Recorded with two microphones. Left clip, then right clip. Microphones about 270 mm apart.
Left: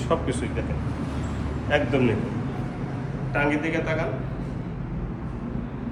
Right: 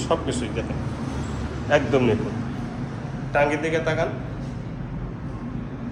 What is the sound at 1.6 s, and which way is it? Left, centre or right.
Speech, centre.